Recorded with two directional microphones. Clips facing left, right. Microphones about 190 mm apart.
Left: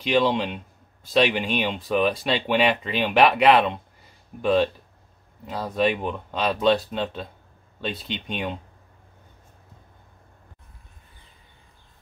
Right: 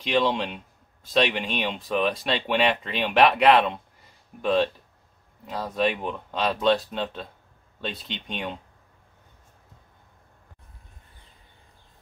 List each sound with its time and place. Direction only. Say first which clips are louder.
0.0 s speech: left 2 dB; centre (ahead or behind)